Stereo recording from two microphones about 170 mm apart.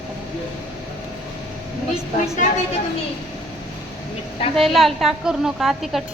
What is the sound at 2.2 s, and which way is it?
Speech, 40° left (ahead or behind).